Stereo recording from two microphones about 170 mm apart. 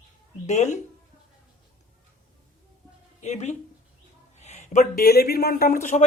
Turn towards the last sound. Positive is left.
turn(degrees=50)  # may be behind; listen again after turning